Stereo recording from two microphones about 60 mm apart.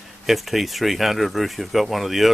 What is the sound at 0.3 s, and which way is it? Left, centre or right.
Speech, centre.